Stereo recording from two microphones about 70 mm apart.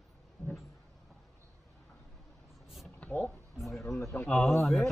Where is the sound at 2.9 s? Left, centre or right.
Left.